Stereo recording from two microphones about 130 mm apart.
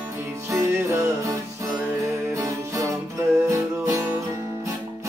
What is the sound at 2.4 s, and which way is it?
Music, 25° right (ahead or behind).